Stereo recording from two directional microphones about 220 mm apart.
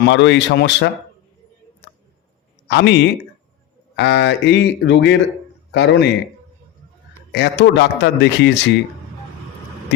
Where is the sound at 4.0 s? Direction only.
50° left (ahead or behind).